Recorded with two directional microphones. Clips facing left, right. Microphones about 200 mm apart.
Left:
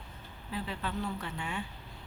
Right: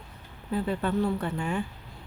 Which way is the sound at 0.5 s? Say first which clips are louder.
Right 10 dB; 50° right (ahead or behind).